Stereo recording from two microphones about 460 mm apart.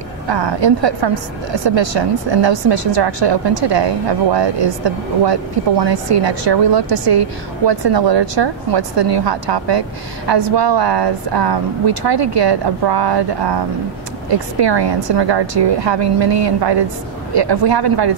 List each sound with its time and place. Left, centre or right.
0.3 s a woman's voice: right
7.1 s a woman's voice: right